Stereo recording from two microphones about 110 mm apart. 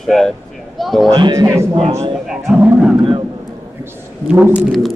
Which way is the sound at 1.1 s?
40° right (ahead or behind).